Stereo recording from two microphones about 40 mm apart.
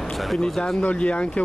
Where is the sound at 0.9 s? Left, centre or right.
Left.